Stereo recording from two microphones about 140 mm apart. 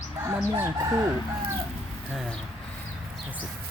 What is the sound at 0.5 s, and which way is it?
Chicken, 15° right (ahead or behind).